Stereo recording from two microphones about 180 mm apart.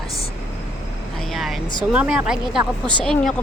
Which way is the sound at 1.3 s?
Centre (ahead or behind).